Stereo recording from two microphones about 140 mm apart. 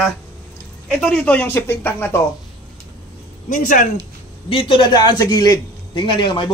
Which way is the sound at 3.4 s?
75° left (ahead or behind).